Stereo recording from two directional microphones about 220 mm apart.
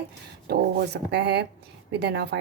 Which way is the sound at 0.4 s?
50° right (ahead or behind).